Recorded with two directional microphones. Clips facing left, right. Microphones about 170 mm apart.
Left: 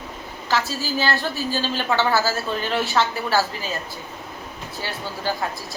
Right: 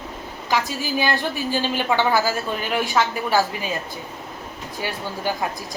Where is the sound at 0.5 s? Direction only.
15° right (ahead or behind).